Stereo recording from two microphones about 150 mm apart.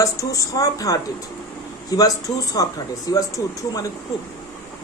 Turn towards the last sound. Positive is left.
turn(degrees=25)  # may be behind; listen again after turning